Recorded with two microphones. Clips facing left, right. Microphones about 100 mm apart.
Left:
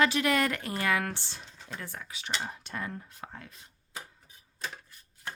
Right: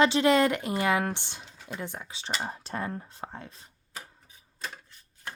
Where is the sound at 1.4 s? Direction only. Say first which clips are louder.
Right 3 dB; 5° right (ahead or behind).